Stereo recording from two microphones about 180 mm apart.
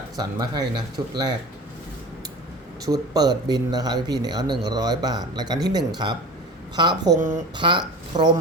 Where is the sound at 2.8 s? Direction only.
20° right (ahead or behind).